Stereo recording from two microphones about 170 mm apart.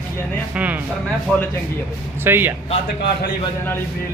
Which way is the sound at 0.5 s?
10° right (ahead or behind).